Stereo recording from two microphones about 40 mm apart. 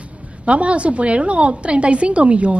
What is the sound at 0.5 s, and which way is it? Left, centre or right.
A woman's voice, right.